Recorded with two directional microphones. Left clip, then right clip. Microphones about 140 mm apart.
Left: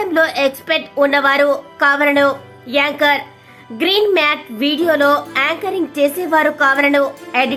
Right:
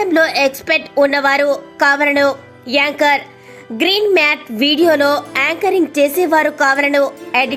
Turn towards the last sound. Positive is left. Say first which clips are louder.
# right 1 dB
turn(degrees=-35)  # may be behind; listen again after turning